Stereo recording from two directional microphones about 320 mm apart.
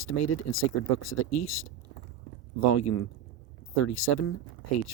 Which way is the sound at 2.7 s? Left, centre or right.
Left.